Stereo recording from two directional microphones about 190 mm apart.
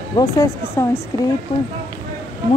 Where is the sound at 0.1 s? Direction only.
20° left (ahead or behind).